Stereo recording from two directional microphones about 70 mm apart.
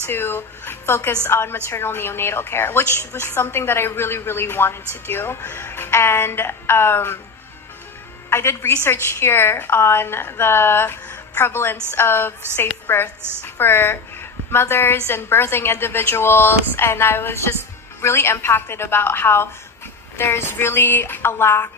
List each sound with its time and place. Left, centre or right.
0.0 s a woman's voice: left
8.3 s a woman's voice: left